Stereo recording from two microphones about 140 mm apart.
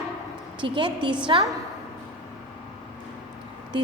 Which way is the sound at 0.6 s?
35° right (ahead or behind).